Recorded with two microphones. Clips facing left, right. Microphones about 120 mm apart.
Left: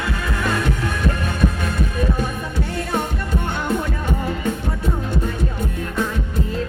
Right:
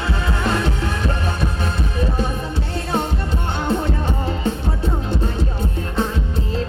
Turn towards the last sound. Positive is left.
turn(degrees=-30)  # may be behind; listen again after turning